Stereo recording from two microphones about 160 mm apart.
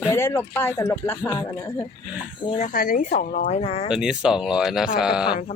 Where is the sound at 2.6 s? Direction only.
60° left (ahead or behind); by 3.9 s 40° left (ahead or behind).